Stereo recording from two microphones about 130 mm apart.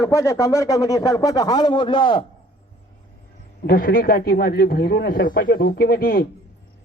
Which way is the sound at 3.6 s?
90° left.